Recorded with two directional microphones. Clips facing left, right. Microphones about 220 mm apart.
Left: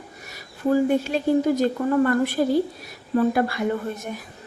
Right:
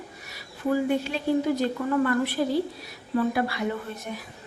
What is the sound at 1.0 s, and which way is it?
Speech, 45° left (ahead or behind).